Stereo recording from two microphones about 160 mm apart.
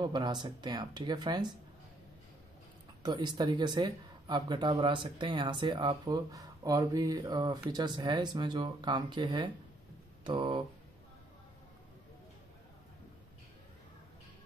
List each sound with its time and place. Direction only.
0.0 s speech: 25° right (ahead or behind)
3.0 s speech: 30° right (ahead or behind)